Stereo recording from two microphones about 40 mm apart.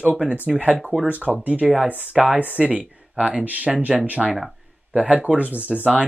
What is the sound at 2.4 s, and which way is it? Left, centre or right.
Speech, right.